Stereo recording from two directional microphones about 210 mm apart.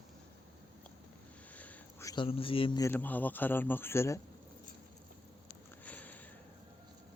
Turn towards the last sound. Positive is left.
turn(degrees=5)  # may be behind; listen again after turning